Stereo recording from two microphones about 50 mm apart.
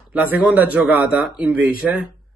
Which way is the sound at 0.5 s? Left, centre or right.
Right.